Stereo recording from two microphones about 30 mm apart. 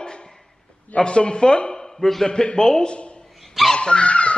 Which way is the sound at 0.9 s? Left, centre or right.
Left.